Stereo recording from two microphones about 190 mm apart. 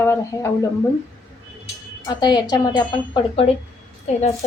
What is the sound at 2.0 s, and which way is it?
Speech, 20° left (ahead or behind).